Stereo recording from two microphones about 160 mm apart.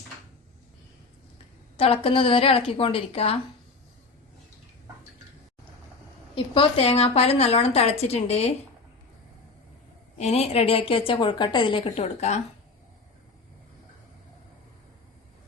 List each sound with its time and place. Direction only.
1.8 s a woman's voice: 35° left (ahead or behind)
6.3 s a woman's voice: 35° left (ahead or behind)
10.2 s a woman's voice: 40° left (ahead or behind)